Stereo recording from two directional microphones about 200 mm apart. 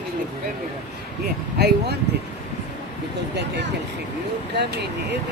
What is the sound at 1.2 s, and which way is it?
Speech, 55° right (ahead or behind).